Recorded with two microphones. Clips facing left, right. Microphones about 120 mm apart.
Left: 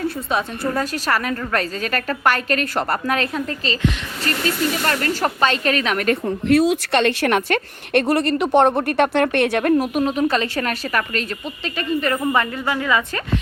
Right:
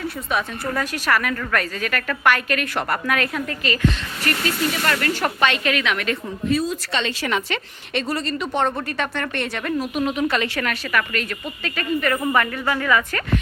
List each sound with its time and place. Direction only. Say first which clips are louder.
0.3 s a woman's voice: right 1 dB; 30° left (ahead or behind)
6.2 s a woman's voice: left 7 dB; 75° left (ahead or behind); by 10.0 s 55° left (ahead or behind)
10.0 s a woman's voice: left 2 dB; 35° left (ahead or behind); by 13.2 s 20° left (ahead or behind)